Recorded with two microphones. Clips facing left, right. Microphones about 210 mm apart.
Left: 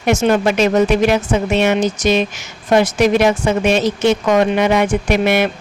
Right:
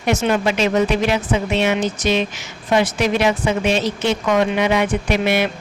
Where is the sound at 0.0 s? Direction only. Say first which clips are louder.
Left 4 dB; 45° left (ahead or behind).